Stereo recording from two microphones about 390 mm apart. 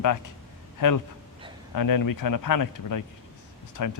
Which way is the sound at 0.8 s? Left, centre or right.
Left.